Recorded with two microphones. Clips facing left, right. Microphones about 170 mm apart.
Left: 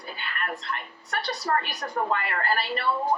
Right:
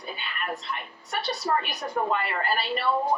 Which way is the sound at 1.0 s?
15° right (ahead or behind).